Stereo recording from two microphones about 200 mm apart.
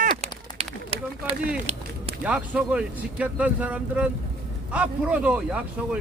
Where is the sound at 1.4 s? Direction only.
30° right (ahead or behind).